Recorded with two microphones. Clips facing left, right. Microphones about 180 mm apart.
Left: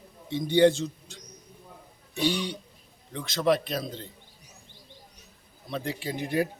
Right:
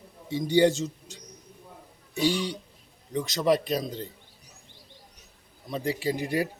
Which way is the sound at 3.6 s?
40° right (ahead or behind).